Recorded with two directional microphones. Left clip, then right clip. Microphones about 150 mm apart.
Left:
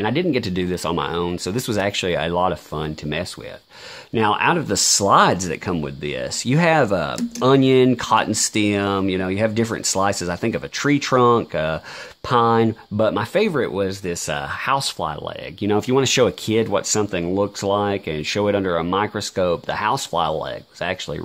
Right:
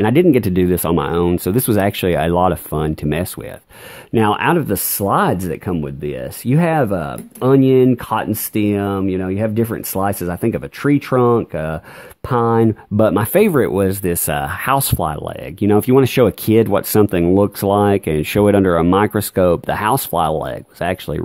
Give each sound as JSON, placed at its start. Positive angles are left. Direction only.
{"t": 0.0, "sound": "speech", "side_deg": -45}